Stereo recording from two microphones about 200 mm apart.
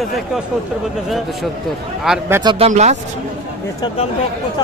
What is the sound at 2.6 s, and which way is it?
Speech, 35° right (ahead or behind).